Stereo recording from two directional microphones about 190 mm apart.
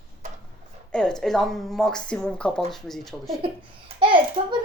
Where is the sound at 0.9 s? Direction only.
5° left (ahead or behind).